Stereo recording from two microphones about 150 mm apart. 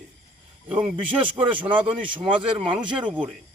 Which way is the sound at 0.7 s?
10° right (ahead or behind).